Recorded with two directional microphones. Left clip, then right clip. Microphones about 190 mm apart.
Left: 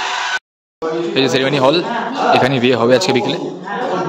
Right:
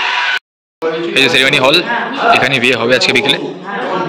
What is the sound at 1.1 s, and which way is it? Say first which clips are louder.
Speech: right 6 dB; 20° left (ahead or behind).